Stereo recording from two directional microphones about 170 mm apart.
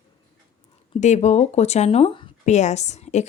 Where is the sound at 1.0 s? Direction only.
45° left (ahead or behind).